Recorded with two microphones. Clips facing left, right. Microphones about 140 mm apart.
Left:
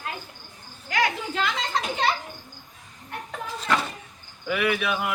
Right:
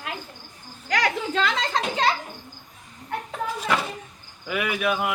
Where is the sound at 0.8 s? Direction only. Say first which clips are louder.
Right 1 dB; 85° right.